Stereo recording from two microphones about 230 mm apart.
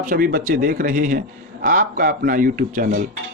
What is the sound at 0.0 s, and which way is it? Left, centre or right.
Speech, right.